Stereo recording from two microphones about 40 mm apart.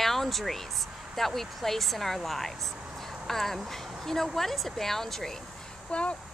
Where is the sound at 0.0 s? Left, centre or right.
Centre.